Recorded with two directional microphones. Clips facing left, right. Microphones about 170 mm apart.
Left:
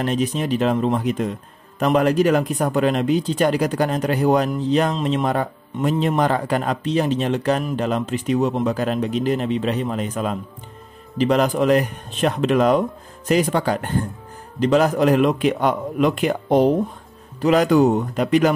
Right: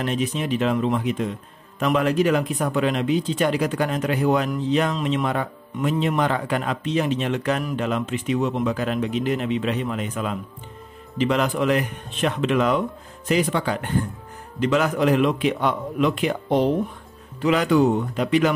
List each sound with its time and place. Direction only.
0.0 s speech: 40° left (ahead or behind)